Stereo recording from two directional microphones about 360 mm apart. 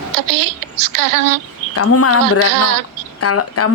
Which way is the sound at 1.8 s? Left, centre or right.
Left.